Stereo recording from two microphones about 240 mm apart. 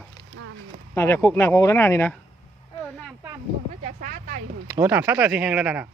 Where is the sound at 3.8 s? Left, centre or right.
Right.